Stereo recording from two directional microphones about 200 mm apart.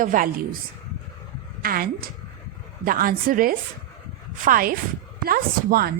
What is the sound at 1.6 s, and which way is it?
A woman's voice, 45° right (ahead or behind).